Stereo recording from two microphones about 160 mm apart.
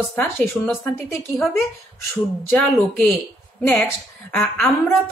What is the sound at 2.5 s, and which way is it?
A woman's voice, 10° left (ahead or behind).